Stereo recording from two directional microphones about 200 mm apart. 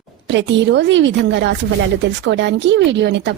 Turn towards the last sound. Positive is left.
turn(degrees=-60)  # may be behind; listen again after turning